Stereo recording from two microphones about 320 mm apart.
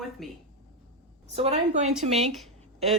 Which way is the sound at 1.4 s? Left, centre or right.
Centre.